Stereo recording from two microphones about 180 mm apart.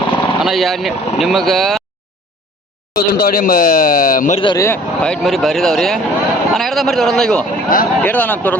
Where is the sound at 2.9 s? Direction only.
55° left (ahead or behind).